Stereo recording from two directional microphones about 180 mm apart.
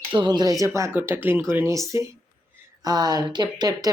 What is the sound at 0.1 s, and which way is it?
Speech, 25° right (ahead or behind).